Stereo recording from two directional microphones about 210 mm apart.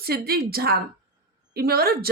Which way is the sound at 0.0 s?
45° right (ahead or behind).